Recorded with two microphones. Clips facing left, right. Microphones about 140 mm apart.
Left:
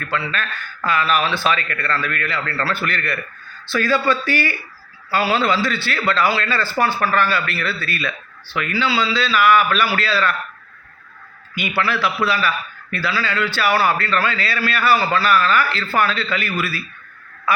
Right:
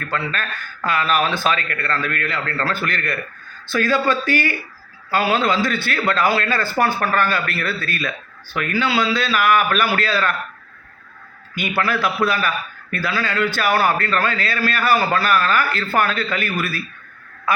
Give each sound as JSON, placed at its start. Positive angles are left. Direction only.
{"t": 0.1, "sound": "a man's voice", "side_deg": -45}
{"t": 11.8, "sound": "a man's voice", "side_deg": -50}